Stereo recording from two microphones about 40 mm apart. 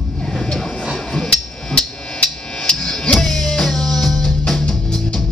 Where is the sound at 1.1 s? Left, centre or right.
Centre.